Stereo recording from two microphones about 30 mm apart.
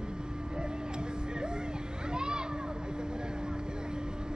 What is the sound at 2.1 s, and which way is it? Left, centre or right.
Children playing, right.